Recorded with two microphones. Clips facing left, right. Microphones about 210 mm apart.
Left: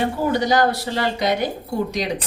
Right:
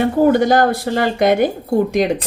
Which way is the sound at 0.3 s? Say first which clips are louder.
Right 3 dB; 50° right (ahead or behind).